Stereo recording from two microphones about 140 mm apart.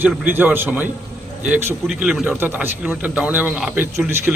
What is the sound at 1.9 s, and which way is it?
Speech, 5° right (ahead or behind).